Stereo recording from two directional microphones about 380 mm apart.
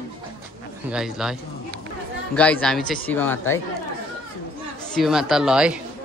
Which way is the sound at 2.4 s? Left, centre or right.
Centre.